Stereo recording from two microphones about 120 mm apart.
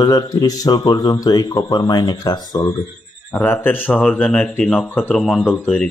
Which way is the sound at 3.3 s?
15° left (ahead or behind).